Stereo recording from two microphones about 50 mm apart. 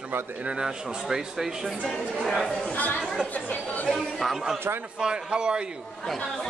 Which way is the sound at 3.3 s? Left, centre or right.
Left.